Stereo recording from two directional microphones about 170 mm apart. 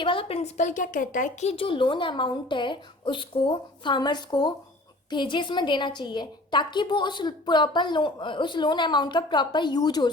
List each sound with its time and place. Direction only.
0.0 s speech: 30° left (ahead or behind)